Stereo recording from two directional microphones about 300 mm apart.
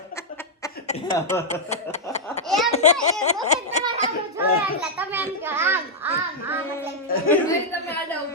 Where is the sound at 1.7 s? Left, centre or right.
Left.